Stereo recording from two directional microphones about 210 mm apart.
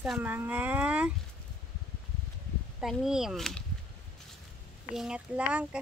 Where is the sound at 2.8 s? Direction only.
Centre (ahead or behind).